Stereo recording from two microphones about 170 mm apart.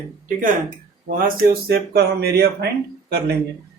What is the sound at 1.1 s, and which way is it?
Speech, 55° right (ahead or behind).